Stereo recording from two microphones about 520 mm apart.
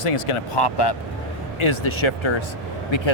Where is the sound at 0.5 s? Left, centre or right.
Left.